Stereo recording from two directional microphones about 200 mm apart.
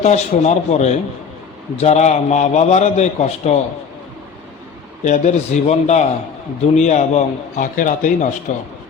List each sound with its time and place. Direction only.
0.0 s a man's voice: 35° left (ahead or behind)
5.0 s a man's voice: 35° left (ahead or behind)